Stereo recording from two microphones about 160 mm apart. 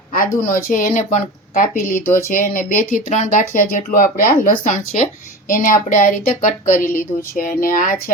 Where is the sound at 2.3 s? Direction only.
60° left (ahead or behind).